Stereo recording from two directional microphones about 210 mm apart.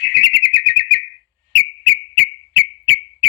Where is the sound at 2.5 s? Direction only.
55° left (ahead or behind).